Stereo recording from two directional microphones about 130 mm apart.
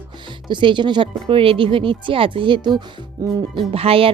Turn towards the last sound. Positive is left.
turn(degrees=-45)  # may be behind; listen again after turning